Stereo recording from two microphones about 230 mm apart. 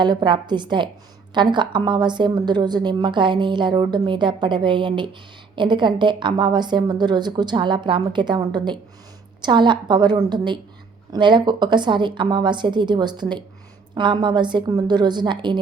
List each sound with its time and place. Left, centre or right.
0.0 s a woman's voice: centre